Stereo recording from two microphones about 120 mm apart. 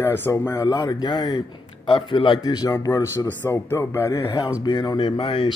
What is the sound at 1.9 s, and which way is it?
Speech, 50° left (ahead or behind).